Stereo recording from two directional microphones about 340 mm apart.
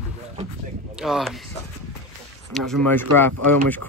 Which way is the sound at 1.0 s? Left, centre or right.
Centre.